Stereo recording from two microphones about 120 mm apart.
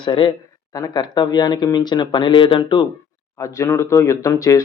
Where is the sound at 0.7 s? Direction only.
30° left (ahead or behind).